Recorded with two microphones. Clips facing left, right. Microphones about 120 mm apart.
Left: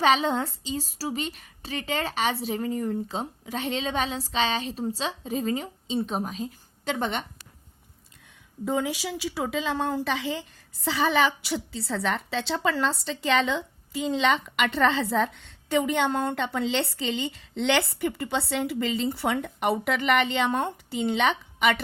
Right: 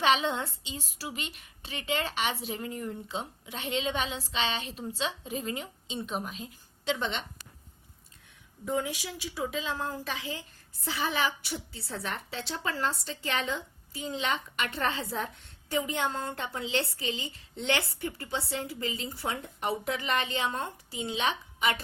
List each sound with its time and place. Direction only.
0.0 s a woman's voice: 40° left (ahead or behind)
8.6 s a woman's voice: 90° left; by 21.8 s 70° left (ahead or behind)